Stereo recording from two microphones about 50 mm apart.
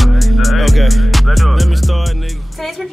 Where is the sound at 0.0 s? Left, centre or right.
Centre.